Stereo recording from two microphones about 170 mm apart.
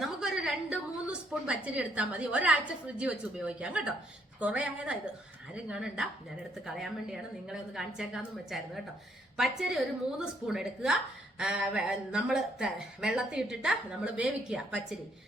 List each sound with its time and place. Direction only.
0.0 s a woman's voice: 5° right (ahead or behind)